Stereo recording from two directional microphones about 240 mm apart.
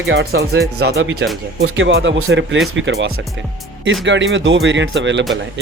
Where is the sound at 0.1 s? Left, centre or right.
Right.